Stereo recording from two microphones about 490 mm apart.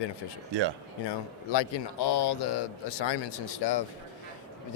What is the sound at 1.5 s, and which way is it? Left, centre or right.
Speech, left.